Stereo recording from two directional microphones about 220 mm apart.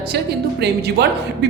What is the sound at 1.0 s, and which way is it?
Speech, 50° right (ahead or behind).